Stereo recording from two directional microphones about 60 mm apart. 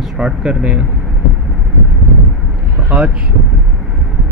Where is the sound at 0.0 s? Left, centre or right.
Centre.